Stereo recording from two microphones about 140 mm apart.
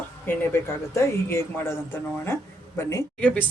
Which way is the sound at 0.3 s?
15° left (ahead or behind).